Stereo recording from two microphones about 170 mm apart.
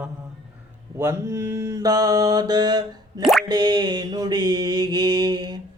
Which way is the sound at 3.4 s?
25° right (ahead or behind).